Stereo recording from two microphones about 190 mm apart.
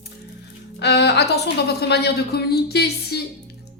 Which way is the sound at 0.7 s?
60° left (ahead or behind).